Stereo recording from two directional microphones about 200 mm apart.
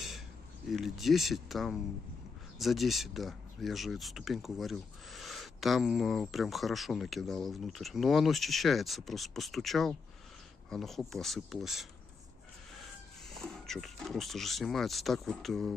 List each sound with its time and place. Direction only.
0.7 s speech: centre (ahead or behind)
13.4 s speech: centre (ahead or behind)